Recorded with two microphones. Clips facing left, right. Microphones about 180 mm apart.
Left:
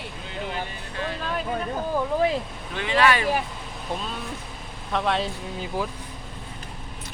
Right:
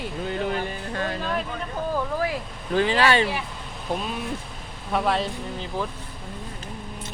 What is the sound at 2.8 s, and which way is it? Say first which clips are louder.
Speech: right 2 dB; 35° right (ahead or behind).